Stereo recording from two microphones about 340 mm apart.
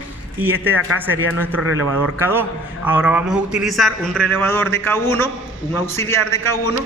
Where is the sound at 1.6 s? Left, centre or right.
Right.